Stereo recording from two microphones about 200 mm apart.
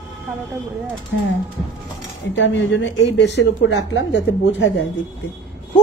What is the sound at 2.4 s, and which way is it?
A woman's voice, 65° left (ahead or behind).